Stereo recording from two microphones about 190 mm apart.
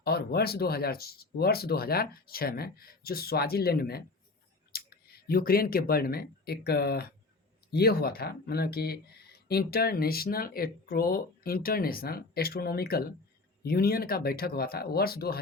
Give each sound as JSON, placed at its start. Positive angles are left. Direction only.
{"t": 0.0, "sound": "speech", "side_deg": 55}